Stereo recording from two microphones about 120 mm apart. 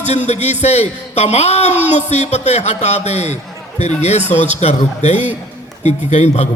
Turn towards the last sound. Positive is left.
turn(degrees=70)  # may be behind; listen again after turning